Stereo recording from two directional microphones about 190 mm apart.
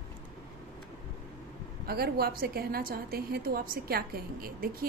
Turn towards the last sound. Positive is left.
turn(degrees=-50)  # may be behind; listen again after turning